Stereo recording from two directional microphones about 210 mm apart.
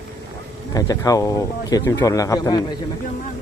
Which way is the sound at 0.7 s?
15° left (ahead or behind).